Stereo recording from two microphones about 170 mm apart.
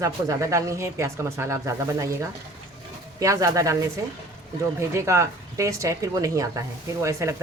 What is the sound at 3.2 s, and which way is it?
Speech, 20° right (ahead or behind).